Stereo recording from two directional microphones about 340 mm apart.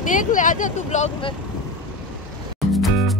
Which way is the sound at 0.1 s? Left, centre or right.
Left.